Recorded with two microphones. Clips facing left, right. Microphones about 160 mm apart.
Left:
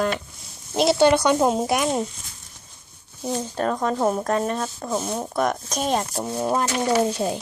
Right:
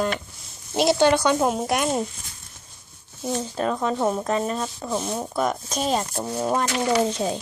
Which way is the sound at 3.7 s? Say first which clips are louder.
Left 1 dB; 35° left (ahead or behind).